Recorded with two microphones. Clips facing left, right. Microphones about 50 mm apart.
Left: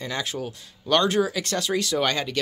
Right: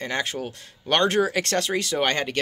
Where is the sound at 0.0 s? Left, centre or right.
Right.